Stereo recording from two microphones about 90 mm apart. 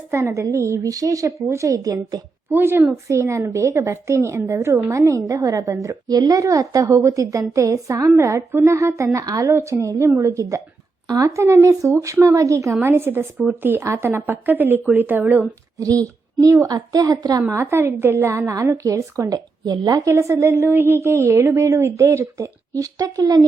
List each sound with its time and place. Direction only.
0.1 s a woman's voice: 30° right (ahead or behind)
2.5 s a woman's voice: 25° right (ahead or behind)
3.1 s a woman's voice: 35° right (ahead or behind)
9.5 s a woman's voice: 30° right (ahead or behind)
12.8 s a woman's voice: 25° right (ahead or behind)
15.8 s a woman's voice: 40° right (ahead or behind)
17.5 s a woman's voice: 30° right (ahead or behind); by 20.0 s 45° right (ahead or behind)
20.1 s a woman's voice: 30° right (ahead or behind); by 23.5 s 45° right (ahead or behind)